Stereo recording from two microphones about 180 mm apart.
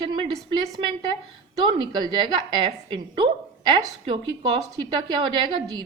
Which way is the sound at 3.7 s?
30° right (ahead or behind).